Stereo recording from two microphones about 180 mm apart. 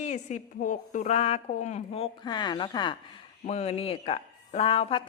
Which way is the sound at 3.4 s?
35° left (ahead or behind).